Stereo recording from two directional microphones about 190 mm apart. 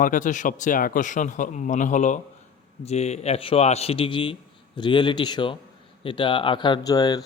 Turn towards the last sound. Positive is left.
turn(degrees=20)  # may be behind; listen again after turning